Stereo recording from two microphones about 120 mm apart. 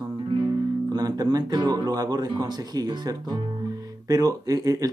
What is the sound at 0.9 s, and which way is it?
Speech, 30° right (ahead or behind).